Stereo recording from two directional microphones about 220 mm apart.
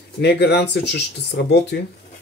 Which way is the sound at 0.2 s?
50° left (ahead or behind).